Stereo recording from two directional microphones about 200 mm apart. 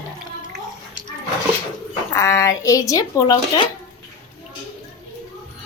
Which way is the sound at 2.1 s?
15° left (ahead or behind).